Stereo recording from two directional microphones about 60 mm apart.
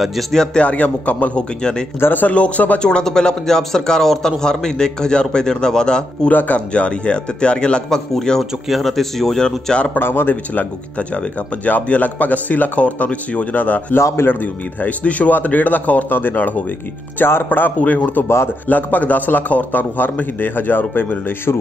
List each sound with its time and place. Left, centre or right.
0.0 s a man's voice: centre
0.4 s speech: left
1.6 s speech: centre
2.0 s speech: left; by 6.3 s centre
6.3 s a man's voice: left
9.9 s a man's voice: left
10.3 s a man's voice: left